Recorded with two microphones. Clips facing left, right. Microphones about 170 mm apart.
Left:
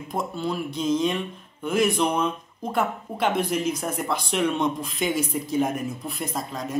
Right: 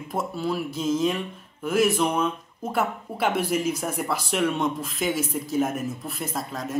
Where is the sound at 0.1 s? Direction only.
5° right (ahead or behind).